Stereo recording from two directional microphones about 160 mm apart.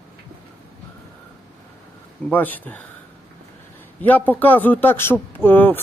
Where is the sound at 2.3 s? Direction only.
10° left (ahead or behind).